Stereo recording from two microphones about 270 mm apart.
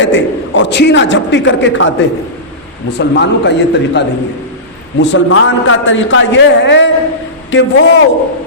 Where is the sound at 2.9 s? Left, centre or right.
Left.